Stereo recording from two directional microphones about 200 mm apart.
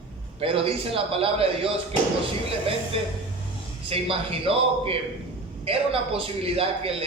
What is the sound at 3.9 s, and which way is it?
A man's voice, 30° right (ahead or behind).